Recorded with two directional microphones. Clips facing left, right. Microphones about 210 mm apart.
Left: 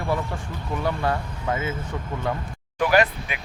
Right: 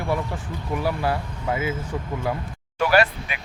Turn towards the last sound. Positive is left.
turn(degrees=15)  # may be behind; listen again after turning